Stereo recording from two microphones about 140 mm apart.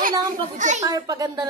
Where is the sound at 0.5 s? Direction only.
60° right (ahead or behind).